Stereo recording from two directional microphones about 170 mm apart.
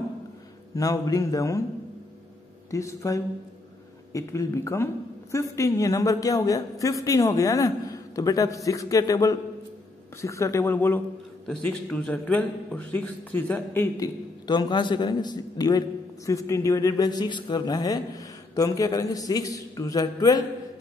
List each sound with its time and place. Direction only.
0.7 s a woman's voice: 20° left (ahead or behind)
2.7 s a man's voice: 20° left (ahead or behind)
13.9 s a woman's voice: 20° left (ahead or behind)